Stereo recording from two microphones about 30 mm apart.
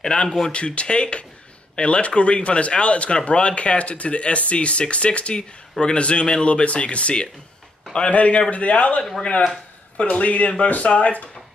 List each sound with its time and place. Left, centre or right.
0.1 s a man's voice: left